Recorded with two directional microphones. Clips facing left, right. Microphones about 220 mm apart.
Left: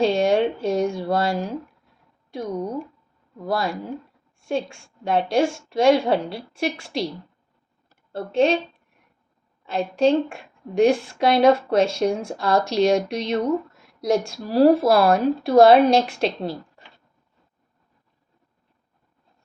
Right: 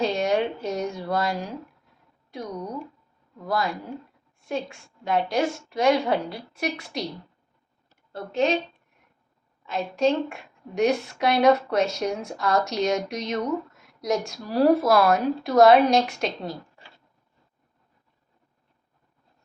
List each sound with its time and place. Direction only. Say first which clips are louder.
0.0 s a sound: left 5 dB; 30° left (ahead or behind)
3.4 s a woman's voice: left 2 dB; 30° left (ahead or behind)
8.1 s a woman's voice: left 4 dB; 30° left (ahead or behind)
9.6 s a woman's voice: left 4 dB; 30° left (ahead or behind)